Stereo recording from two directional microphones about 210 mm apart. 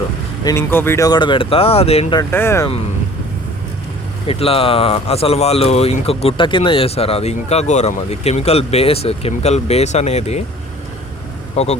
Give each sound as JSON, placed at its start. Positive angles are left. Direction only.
{"t": 0.4, "sound": "speech", "side_deg": 10}
{"t": 2.3, "sound": "speech", "side_deg": 10}
{"t": 4.3, "sound": "speech", "side_deg": 25}
{"t": 11.5, "sound": "speech", "side_deg": 30}